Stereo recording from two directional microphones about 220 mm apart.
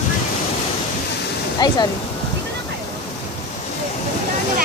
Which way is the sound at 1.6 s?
20° left (ahead or behind).